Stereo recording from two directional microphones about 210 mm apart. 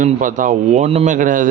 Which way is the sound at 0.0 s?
40° right (ahead or behind).